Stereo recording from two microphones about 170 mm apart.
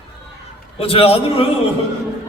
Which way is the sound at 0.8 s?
35° left (ahead or behind).